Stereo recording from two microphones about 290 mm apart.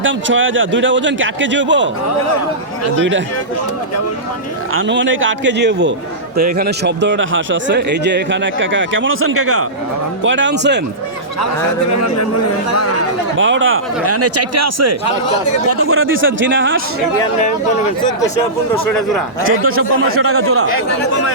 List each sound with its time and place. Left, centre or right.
0.0 s a man's voice: right
4.7 s a man's voice: right
11.9 s a man's voice: left
13.3 s a man's voice: right
15.8 s a man's voice: right
19.5 s a man's voice: right